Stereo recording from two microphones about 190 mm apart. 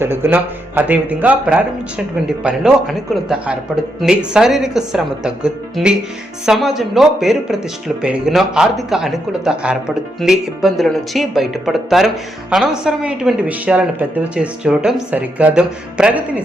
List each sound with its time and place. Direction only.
0.0 s a man's voice: 10° right (ahead or behind)